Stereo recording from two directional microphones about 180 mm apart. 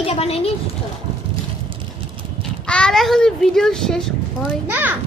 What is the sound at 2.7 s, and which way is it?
A child's voice, 5° left (ahead or behind).